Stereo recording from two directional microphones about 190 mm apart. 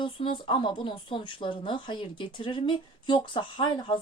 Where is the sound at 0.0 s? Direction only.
25° left (ahead or behind).